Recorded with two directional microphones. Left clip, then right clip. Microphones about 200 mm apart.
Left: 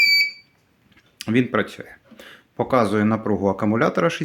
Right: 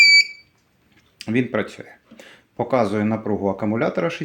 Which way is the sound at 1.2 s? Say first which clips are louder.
Left 2 dB; 10° left (ahead or behind).